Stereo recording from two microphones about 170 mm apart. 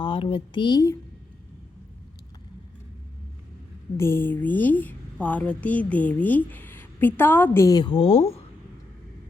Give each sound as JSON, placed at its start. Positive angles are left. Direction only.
{"t": 0.0, "sound": "speech", "side_deg": 30}
{"t": 3.9, "sound": "a woman's voice", "side_deg": 15}